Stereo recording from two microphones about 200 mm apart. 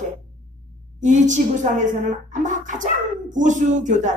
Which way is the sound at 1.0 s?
35° right (ahead or behind).